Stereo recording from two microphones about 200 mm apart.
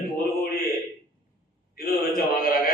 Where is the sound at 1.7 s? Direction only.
45° left (ahead or behind).